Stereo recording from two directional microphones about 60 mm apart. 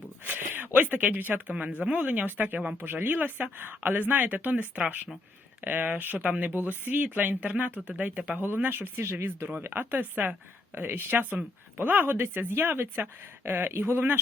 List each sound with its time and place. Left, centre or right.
0.3 s speech: right
1.8 s speech: right